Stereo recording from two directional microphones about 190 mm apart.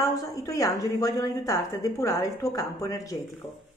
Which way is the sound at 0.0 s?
15° left (ahead or behind).